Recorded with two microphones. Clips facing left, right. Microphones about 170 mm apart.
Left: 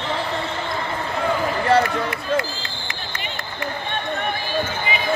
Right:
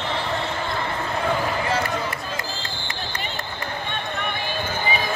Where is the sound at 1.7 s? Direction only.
65° left (ahead or behind).